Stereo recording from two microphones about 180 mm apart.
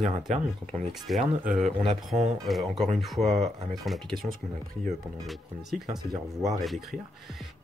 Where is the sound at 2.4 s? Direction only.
Centre (ahead or behind).